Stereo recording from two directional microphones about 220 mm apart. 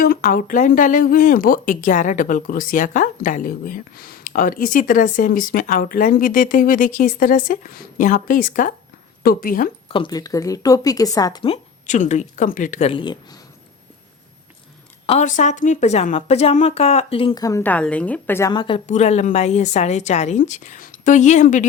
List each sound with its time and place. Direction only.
0.0 s speech: 40° left (ahead or behind)
9.9 s a woman's voice: 20° left (ahead or behind)
15.0 s a woman's voice: 30° left (ahead or behind)
18.9 s speech: 30° left (ahead or behind)